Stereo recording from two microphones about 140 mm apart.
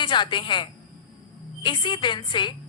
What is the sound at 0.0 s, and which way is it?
A woman's voice, 35° left (ahead or behind).